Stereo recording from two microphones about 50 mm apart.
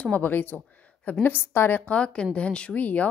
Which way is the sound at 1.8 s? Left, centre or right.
Left.